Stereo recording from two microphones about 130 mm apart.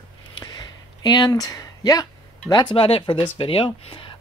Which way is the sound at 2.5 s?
35° left (ahead or behind).